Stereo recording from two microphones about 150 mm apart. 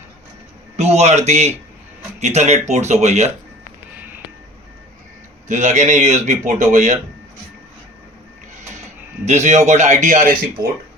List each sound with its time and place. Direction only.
0.8 s speech: 45° right (ahead or behind)
5.5 s speech: 55° right (ahead or behind)
9.2 s speech: 50° right (ahead or behind)